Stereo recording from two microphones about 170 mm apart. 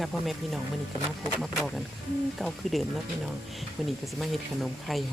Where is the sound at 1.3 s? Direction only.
Centre (ahead or behind).